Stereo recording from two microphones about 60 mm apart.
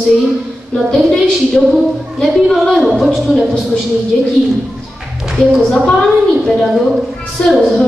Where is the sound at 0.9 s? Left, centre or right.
Centre.